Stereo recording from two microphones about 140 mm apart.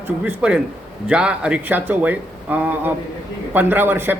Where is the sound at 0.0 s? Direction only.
10° right (ahead or behind).